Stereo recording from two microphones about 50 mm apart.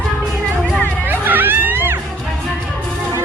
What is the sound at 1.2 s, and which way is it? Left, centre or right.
Music, right.